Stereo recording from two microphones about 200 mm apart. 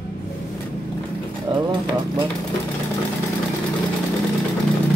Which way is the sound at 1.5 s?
25° right (ahead or behind).